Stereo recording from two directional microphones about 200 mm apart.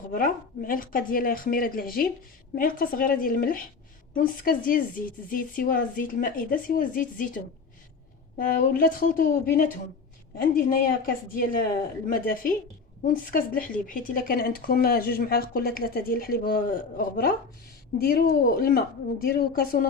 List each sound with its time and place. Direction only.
0.1 s speech: 45° left (ahead or behind)